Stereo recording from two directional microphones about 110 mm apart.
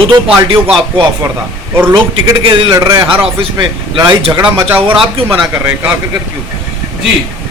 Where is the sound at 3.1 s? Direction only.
55° right (ahead or behind).